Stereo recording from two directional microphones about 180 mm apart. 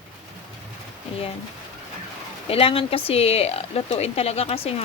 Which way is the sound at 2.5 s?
30° left (ahead or behind).